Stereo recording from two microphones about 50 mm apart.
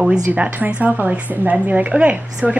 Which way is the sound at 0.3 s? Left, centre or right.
Right.